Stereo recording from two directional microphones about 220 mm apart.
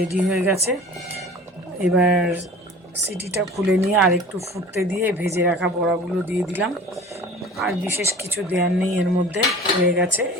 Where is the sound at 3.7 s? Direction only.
Centre (ahead or behind).